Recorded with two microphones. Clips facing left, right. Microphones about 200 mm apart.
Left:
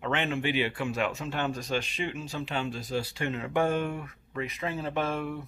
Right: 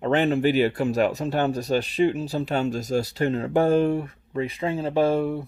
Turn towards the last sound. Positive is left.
turn(degrees=-30)  # may be behind; listen again after turning